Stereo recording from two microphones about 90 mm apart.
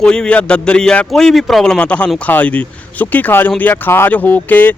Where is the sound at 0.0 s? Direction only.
10° left (ahead or behind).